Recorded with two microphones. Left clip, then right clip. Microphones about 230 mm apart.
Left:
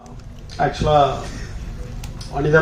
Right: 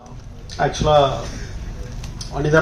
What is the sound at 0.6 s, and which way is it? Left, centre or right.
Speech, right.